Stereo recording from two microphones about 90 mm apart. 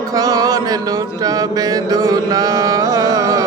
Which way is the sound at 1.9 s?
40° right (ahead or behind).